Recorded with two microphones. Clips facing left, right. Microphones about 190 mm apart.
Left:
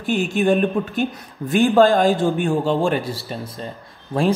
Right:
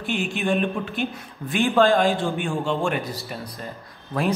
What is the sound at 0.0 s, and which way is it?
A man's voice, 40° left (ahead or behind).